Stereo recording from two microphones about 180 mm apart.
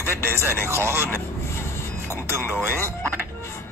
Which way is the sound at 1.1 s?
15° left (ahead or behind).